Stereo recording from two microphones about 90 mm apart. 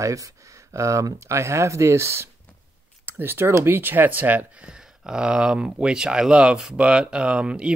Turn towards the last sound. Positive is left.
turn(degrees=-10)  # may be behind; listen again after turning